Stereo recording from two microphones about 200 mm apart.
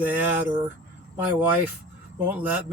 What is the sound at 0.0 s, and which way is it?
Speech, 10° right (ahead or behind).